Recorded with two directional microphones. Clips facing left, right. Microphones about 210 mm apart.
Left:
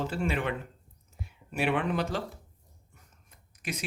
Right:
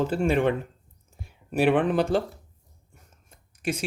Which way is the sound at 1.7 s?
50° right (ahead or behind).